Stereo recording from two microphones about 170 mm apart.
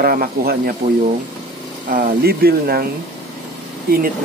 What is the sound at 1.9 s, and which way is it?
Speech, 55° right (ahead or behind).